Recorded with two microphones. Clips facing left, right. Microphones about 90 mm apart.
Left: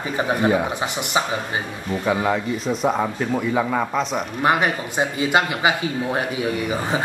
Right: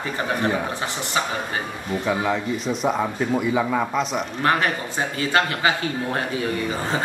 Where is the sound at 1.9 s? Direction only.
5° left (ahead or behind).